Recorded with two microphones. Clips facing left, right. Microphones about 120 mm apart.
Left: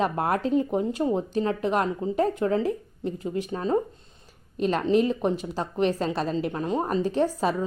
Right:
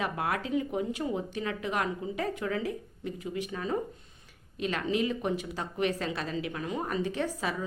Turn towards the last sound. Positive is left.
turn(degrees=35)  # may be behind; listen again after turning